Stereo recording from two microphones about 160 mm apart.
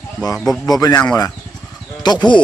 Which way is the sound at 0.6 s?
25° left (ahead or behind).